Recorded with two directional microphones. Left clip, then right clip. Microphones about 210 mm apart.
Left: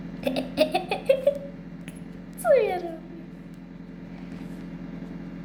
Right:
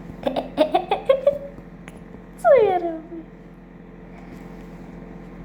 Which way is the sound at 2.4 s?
5° left (ahead or behind).